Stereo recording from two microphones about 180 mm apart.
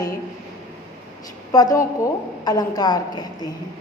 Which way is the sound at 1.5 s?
20° left (ahead or behind).